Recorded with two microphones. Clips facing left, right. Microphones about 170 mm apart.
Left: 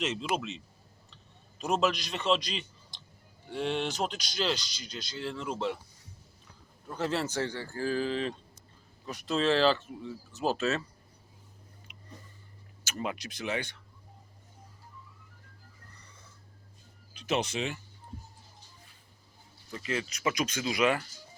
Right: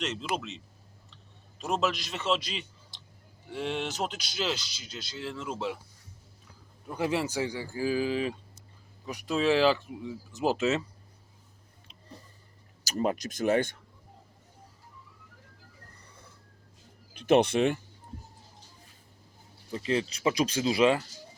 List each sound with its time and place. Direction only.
0.0 s speech: centre (ahead or behind)
1.1 s a sound: centre (ahead or behind)
3.5 s speech: 5° right (ahead or behind)
6.8 s speech: 10° right (ahead or behind)
11.9 s a sound: 30° right (ahead or behind)
12.8 s speech: 40° right (ahead or behind)
17.2 s speech: 55° right (ahead or behind)
19.7 s speech: 30° right (ahead or behind)